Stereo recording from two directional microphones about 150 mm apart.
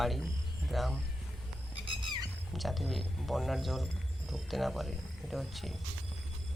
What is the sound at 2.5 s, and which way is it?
A man's voice, centre (ahead or behind).